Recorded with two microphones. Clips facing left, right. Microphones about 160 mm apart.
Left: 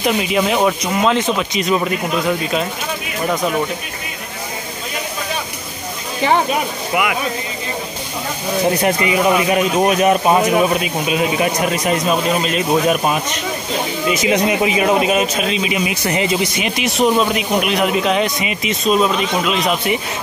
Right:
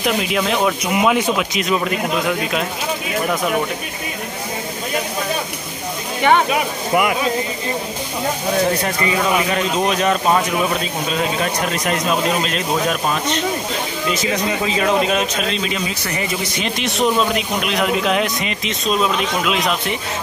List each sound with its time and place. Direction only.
0.0 s speech: centre (ahead or behind)
0.9 s speech: 10° right (ahead or behind)
8.8 s speech: 15° left (ahead or behind); by 20.0 s centre (ahead or behind)